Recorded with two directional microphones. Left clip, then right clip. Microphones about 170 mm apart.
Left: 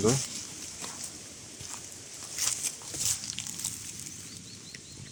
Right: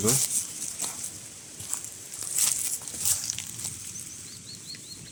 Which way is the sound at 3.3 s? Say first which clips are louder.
Right 3 dB; 35° right (ahead or behind).